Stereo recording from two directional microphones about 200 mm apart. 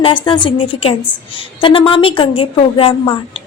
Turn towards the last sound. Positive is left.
turn(degrees=25)  # may be behind; listen again after turning